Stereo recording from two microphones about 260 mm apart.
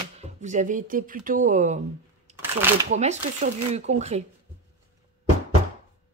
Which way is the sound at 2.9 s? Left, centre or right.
Right.